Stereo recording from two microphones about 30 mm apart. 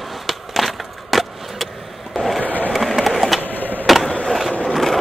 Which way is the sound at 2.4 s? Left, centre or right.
Right.